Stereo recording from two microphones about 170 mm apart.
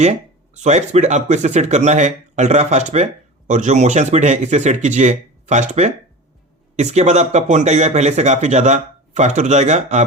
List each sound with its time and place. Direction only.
0.0 s speech: 40° right (ahead or behind)